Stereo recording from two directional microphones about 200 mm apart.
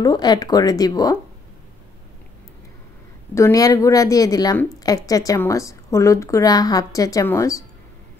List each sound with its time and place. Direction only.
0.0 s speech: 20° left (ahead or behind)
3.3 s a woman's voice: 15° left (ahead or behind)